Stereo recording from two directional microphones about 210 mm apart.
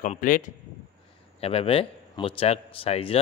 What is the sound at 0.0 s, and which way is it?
Speech, 40° left (ahead or behind).